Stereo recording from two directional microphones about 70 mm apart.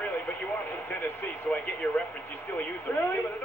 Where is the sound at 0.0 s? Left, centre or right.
Left.